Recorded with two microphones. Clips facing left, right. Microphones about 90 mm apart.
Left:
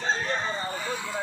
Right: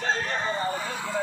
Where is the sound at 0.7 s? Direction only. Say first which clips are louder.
Right 2 dB; 20° right (ahead or behind).